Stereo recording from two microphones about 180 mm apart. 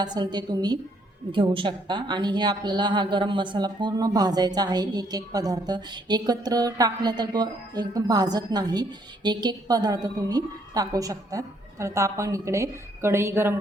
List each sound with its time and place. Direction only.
0.0 s a woman's voice: 25° right (ahead or behind)